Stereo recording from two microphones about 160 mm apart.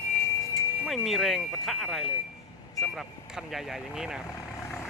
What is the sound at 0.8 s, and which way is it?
Speech, 5° right (ahead or behind).